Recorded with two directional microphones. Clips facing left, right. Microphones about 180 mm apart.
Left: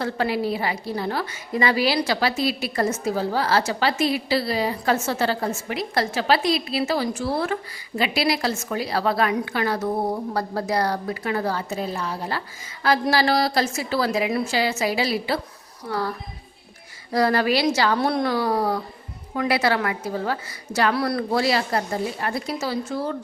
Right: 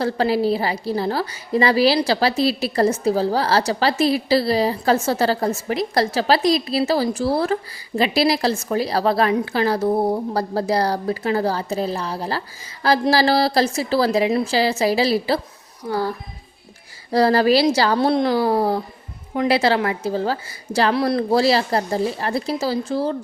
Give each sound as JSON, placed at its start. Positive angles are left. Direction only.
{"t": 0.0, "sound": "a woman's voice", "side_deg": -35}